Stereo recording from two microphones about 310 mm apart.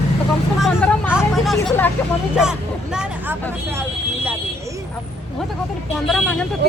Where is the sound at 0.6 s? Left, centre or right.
Centre.